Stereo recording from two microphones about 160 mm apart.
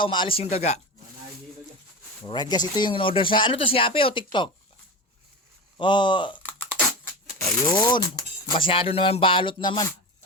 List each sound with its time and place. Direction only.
0.0 s speech: 30° left (ahead or behind)
2.2 s speech: 25° left (ahead or behind)
5.7 s speech: 30° left (ahead or behind)
7.6 s speech: 30° left (ahead or behind)